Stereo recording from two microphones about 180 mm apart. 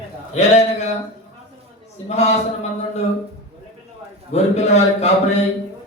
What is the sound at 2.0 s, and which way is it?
Speech, 35° left (ahead or behind).